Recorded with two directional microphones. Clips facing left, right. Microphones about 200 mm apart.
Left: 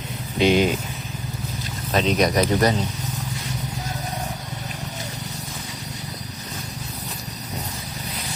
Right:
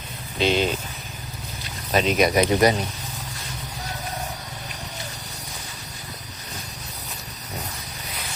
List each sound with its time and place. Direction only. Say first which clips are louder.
0.3 s speech: left 4 dB; 15° left (ahead or behind)
1.9 s speech: even; 5° right (ahead or behind)